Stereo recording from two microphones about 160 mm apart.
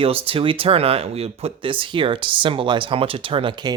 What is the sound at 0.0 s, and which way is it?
Speech, 35° right (ahead or behind).